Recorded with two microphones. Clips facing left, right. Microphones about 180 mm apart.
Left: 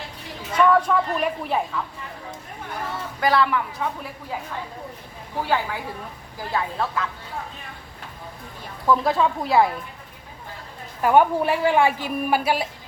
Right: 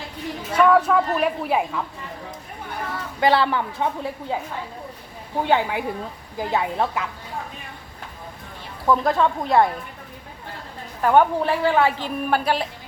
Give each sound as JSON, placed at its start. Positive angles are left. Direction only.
{"t": 0.5, "sound": "speech", "side_deg": -5}
{"t": 3.2, "sound": "a woman's voice", "side_deg": -30}
{"t": 5.4, "sound": "a woman's voice", "side_deg": -20}
{"t": 8.9, "sound": "speech", "side_deg": 0}
{"t": 11.0, "sound": "a woman's voice", "side_deg": 10}